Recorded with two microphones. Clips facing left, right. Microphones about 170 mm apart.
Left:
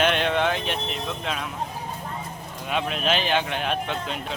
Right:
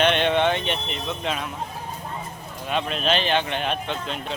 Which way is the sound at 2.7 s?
5° left (ahead or behind).